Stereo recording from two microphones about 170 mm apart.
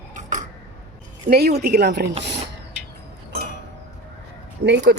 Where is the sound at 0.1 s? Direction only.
45° right (ahead or behind).